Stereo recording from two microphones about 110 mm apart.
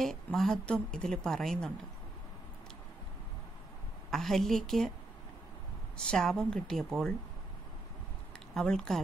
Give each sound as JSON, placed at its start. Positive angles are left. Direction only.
{"t": 0.0, "sound": "a woman's voice", "side_deg": 5}
{"t": 4.1, "sound": "a woman's voice", "side_deg": 5}
{"t": 5.9, "sound": "a woman's voice", "side_deg": 5}
{"t": 8.5, "sound": "a woman's voice", "side_deg": 5}